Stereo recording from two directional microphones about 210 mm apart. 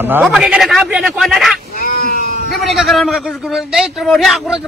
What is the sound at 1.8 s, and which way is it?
Cat, 45° left (ahead or behind).